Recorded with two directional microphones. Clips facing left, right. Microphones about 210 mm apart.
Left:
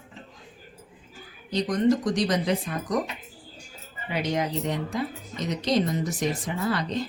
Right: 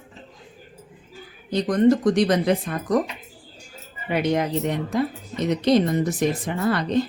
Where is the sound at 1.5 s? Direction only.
55° right (ahead or behind).